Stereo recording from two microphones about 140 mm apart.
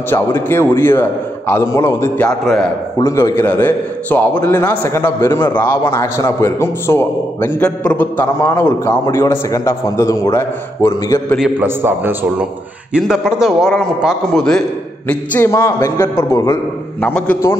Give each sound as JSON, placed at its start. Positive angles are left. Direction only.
{"t": 0.1, "sound": "a man's voice", "side_deg": 15}
{"t": 2.2, "sound": "a man's voice", "side_deg": 0}
{"t": 3.0, "sound": "a man's voice", "side_deg": 25}
{"t": 11.6, "sound": "a man's voice", "side_deg": -15}
{"t": 15.0, "sound": "a man's voice", "side_deg": 15}
{"t": 17.0, "sound": "a man's voice", "side_deg": 10}